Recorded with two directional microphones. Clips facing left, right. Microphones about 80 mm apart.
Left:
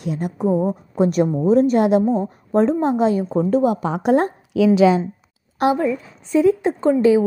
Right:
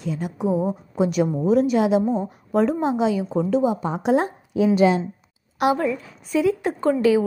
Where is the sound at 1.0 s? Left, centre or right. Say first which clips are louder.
Left 3 dB; left.